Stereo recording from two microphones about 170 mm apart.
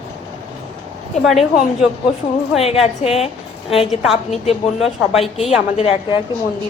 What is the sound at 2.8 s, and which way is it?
A woman's voice, 35° left (ahead or behind).